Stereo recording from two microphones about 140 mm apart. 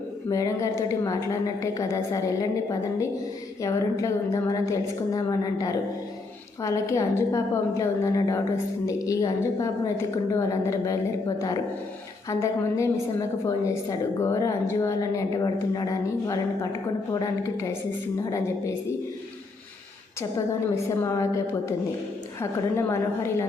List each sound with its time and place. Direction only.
0.3 s a woman's voice: 25° left (ahead or behind)
20.7 s a woman's voice: 20° left (ahead or behind)
22.9 s a woman's voice: 20° left (ahead or behind)